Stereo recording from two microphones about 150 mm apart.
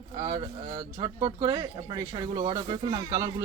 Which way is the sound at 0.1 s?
40° right (ahead or behind).